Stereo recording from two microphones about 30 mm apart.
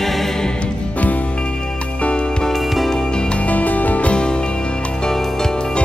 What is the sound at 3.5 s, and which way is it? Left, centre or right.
Music, left.